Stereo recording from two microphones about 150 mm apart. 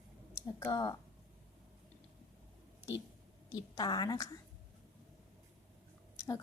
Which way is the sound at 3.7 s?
30° left (ahead or behind).